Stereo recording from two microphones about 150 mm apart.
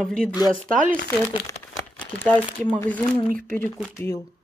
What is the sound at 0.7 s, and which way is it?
Speech, 60° right (ahead or behind).